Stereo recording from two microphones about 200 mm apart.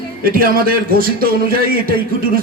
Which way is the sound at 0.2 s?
45° right (ahead or behind).